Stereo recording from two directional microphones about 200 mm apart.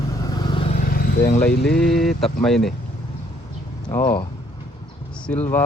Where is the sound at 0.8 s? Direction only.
45° left (ahead or behind).